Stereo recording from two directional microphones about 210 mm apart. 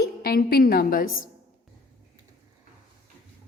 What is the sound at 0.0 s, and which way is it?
A woman's voice, 45° left (ahead or behind).